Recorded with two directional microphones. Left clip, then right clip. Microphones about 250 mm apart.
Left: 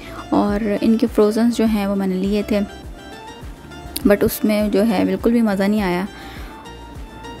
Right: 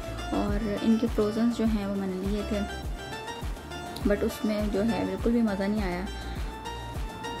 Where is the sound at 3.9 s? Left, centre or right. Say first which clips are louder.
Left 12 dB; left.